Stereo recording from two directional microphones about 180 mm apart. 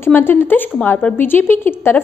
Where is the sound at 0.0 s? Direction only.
10° left (ahead or behind).